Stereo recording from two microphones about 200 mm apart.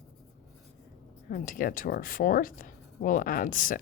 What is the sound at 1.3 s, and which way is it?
Speech, 45° left (ahead or behind).